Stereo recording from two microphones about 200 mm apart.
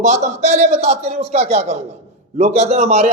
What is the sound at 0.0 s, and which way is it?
A man's voice, 35° right (ahead or behind).